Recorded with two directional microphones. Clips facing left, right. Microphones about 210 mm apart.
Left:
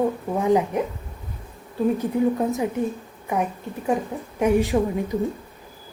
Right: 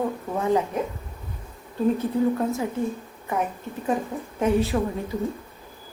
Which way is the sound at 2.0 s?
15° left (ahead or behind).